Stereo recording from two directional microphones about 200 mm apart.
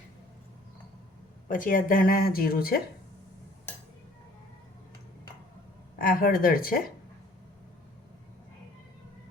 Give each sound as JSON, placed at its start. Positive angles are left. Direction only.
{"t": 1.5, "sound": "speech", "side_deg": 45}
{"t": 6.0, "sound": "speech", "side_deg": 45}